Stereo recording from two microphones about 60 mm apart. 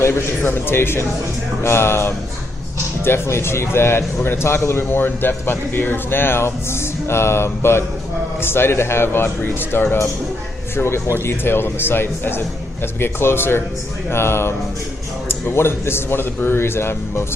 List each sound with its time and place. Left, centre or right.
0.0 s a man's voice: left